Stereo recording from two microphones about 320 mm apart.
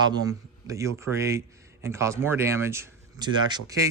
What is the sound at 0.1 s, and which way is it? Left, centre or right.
Speech, centre.